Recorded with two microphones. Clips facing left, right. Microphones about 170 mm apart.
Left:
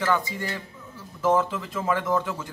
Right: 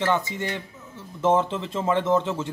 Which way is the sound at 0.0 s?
25° right (ahead or behind).